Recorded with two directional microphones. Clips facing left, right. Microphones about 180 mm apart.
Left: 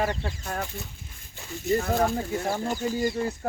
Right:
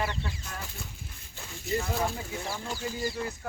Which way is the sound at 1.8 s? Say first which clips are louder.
Left 4 dB; 55° left (ahead or behind).